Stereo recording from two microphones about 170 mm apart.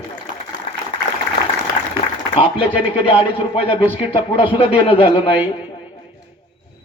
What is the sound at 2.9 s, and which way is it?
A man's voice, 35° left (ahead or behind).